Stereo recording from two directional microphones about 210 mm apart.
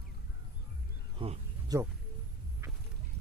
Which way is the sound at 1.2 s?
25° right (ahead or behind).